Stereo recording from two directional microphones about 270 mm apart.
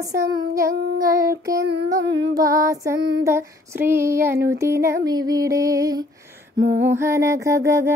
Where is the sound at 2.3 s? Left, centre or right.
Centre.